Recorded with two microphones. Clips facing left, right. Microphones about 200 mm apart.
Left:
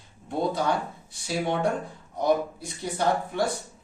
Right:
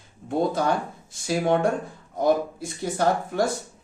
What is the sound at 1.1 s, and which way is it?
Speech, 50° right (ahead or behind).